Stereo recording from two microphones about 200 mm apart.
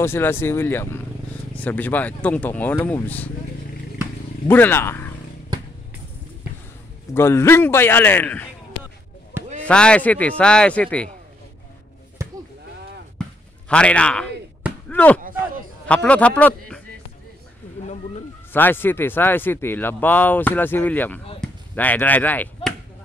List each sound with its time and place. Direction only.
0.0 s speech: 10° left (ahead or behind)
4.5 s speech: 10° left (ahead or behind)
7.2 s speech: 10° left (ahead or behind)
9.3 s a sound: 10° right (ahead or behind)
9.7 s speech: 5° left (ahead or behind)
13.7 s speech: 5° left (ahead or behind)
14.9 s chop: 10° left (ahead or behind)
15.2 s a sound: 45° right (ahead or behind)
15.9 s speech: 5° left (ahead or behind)
18.5 s speech: 10° left (ahead or behind)
21.4 s chop: 10° left (ahead or behind)